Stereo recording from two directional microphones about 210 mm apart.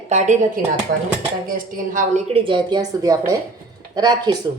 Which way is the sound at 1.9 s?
35° right (ahead or behind).